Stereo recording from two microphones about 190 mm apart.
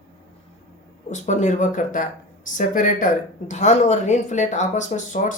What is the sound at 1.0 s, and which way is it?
Speech, 40° left (ahead or behind).